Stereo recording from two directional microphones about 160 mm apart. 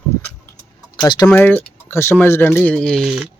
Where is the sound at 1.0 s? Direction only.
25° left (ahead or behind).